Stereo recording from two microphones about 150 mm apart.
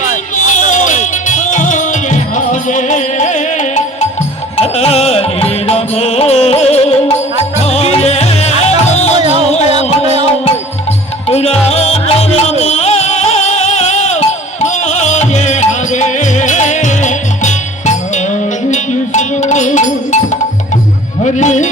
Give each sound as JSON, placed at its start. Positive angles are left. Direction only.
{"t": 0.0, "sound": "music", "side_deg": 55}
{"t": 4.6, "sound": "music", "side_deg": 45}
{"t": 11.3, "sound": "music", "side_deg": 45}